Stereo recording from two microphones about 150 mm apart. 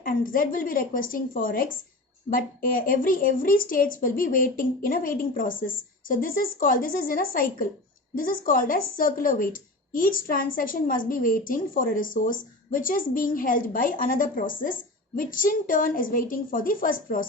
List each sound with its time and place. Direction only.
0.0 s a woman's voice: 70° left (ahead or behind)